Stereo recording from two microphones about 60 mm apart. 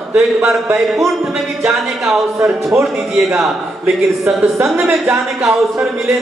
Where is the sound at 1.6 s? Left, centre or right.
Centre.